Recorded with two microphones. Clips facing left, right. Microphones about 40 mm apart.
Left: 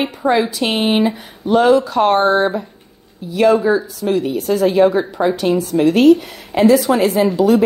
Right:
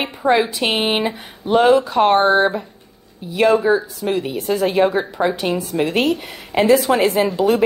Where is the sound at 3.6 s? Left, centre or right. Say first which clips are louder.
Left 1 dB; centre.